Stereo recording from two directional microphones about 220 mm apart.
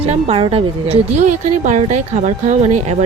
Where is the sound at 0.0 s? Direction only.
30° right (ahead or behind).